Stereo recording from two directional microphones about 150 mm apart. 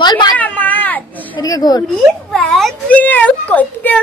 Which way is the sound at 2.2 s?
Centre (ahead or behind).